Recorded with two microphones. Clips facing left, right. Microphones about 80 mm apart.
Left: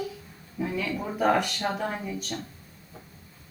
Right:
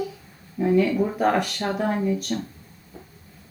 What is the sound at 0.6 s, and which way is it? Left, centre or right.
Speech, centre.